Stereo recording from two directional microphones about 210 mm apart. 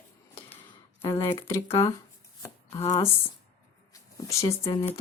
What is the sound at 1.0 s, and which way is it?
Speech, 15° left (ahead or behind).